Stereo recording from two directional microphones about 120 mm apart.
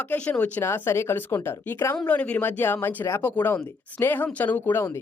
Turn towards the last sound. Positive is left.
turn(degrees=20)  # may be behind; listen again after turning